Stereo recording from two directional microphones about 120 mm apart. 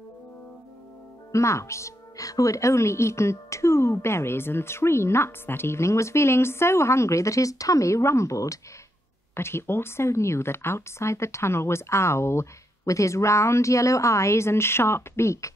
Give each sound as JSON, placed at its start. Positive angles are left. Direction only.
{"t": 1.3, "sound": "speech", "side_deg": 25}